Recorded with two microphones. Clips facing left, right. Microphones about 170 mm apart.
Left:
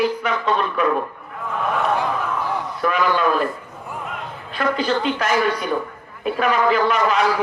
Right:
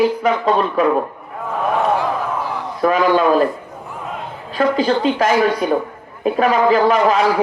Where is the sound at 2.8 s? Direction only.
35° right (ahead or behind).